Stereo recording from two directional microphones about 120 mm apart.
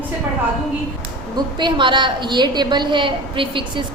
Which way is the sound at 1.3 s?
40° right (ahead or behind).